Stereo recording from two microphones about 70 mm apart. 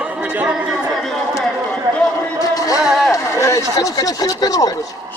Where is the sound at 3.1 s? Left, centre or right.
Left.